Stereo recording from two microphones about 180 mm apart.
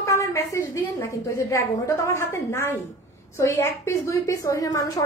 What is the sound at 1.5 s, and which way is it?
A woman's voice, 15° left (ahead or behind).